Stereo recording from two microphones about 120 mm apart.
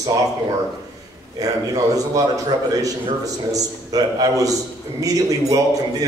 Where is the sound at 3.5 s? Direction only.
30° right (ahead or behind).